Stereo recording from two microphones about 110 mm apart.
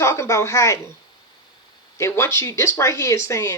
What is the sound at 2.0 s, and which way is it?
Speech, 25° left (ahead or behind).